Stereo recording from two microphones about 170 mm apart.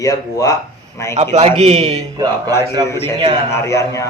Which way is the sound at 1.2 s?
40° right (ahead or behind).